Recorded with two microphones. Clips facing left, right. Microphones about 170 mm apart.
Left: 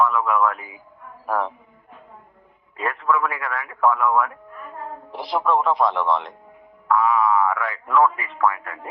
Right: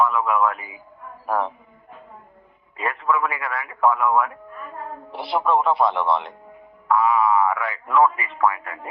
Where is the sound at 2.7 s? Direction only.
5° right (ahead or behind).